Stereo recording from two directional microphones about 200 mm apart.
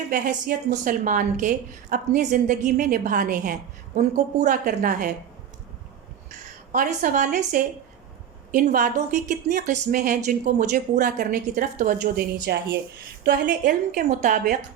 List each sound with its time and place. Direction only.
0.1 s a woman's voice: 40° right (ahead or behind)
6.7 s a woman's voice: 40° right (ahead or behind)